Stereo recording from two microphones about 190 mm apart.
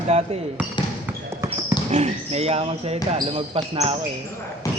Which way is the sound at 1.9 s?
35° right (ahead or behind).